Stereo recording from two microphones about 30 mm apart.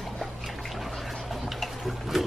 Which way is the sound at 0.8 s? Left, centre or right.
Centre.